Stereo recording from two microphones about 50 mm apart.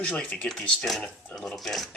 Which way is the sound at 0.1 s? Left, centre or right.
Left.